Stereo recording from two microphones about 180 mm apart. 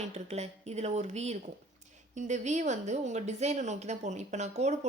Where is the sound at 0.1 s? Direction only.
35° right (ahead or behind).